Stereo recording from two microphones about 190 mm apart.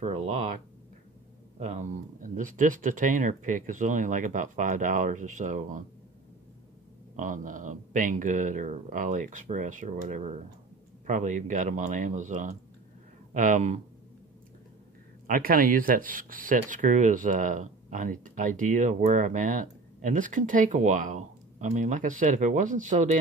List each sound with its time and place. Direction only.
0.0 s speech: 40° right (ahead or behind)
1.6 s speech: 40° right (ahead or behind)
7.2 s speech: 45° right (ahead or behind)
15.2 s speech: 45° right (ahead or behind)